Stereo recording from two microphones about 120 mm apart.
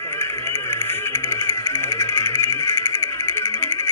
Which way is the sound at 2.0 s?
15° left (ahead or behind).